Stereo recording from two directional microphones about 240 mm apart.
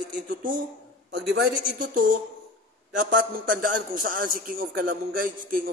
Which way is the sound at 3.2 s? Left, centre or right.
Right.